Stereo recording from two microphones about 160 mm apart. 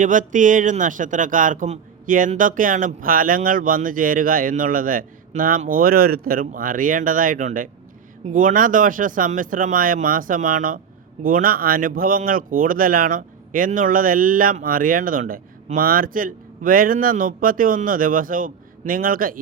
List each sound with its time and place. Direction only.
0.0 s speech: 55° right (ahead or behind)